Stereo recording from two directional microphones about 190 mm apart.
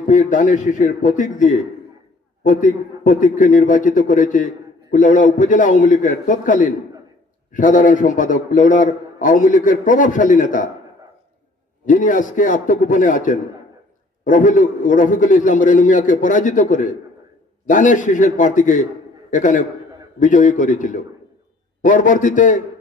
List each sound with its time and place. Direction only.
0.0 s a man's voice: 45° left (ahead or behind)
11.8 s a man's voice: 45° left (ahead or behind)